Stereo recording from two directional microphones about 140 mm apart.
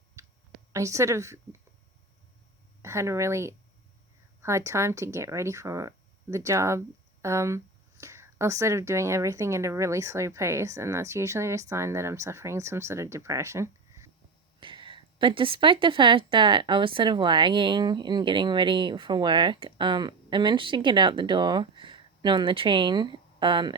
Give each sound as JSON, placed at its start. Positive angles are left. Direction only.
{"t": 0.2, "sound": "a sound", "side_deg": -20}
{"t": 0.7, "sound": "speech", "side_deg": -20}
{"t": 2.8, "sound": "speech", "side_deg": -20}
{"t": 14.6, "sound": "a woman's voice", "side_deg": -35}